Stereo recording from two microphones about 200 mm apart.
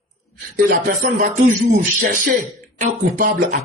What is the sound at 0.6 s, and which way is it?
Speech, 45° right (ahead or behind).